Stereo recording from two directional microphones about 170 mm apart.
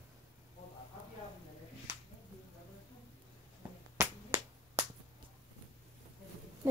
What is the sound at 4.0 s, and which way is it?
Finger snapping, 15° right (ahead or behind).